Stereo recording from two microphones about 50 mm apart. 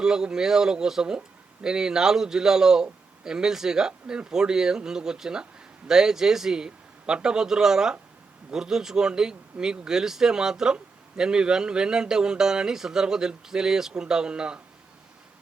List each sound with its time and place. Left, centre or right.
0.0 s speech: centre